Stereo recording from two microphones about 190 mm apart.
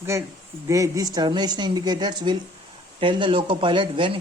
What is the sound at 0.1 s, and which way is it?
Speech, 15° right (ahead or behind).